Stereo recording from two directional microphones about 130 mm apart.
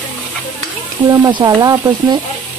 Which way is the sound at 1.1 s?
35° right (ahead or behind).